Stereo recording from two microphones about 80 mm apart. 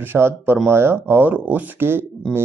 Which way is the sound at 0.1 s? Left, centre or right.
Right.